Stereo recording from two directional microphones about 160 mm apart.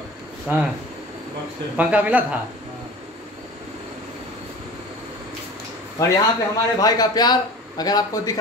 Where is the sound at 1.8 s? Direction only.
10° right (ahead or behind).